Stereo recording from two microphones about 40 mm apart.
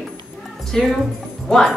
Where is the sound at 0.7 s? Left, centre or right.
Centre.